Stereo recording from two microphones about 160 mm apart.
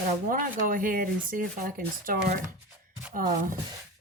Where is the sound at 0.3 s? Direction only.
60° right (ahead or behind).